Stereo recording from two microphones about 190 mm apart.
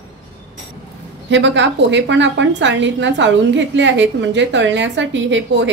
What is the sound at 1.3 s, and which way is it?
A woman's voice, 70° right (ahead or behind).